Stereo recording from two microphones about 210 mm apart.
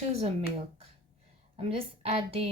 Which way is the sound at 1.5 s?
25° right (ahead or behind).